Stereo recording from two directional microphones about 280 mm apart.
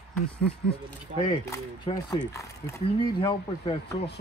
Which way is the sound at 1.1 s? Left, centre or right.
Centre.